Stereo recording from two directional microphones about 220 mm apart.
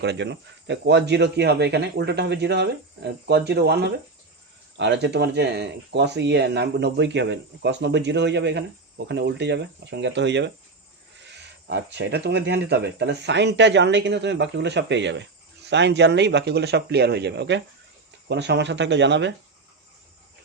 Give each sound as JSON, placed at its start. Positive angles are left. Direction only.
{"t": 0.0, "sound": "speech", "side_deg": -50}
{"t": 11.7, "sound": "speech", "side_deg": -50}